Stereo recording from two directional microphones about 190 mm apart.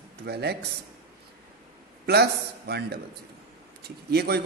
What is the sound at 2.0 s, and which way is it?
A man's voice, 60° right (ahead or behind).